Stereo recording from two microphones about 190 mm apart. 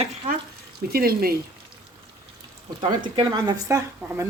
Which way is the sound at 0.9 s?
55° right (ahead or behind).